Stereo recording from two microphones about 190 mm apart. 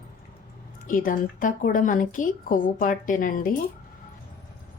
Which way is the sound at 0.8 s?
45° left (ahead or behind).